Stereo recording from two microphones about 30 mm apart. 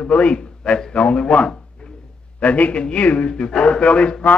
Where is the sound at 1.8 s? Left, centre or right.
Left.